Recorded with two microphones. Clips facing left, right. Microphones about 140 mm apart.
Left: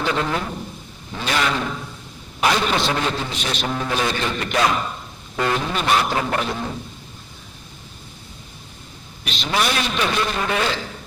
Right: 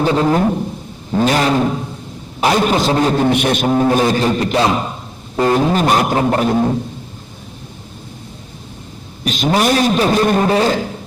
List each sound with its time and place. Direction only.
0.0 s a man's voice: 35° right (ahead or behind)
3.2 s a man's voice: 55° right (ahead or behind)
9.2 s a man's voice: 45° right (ahead or behind)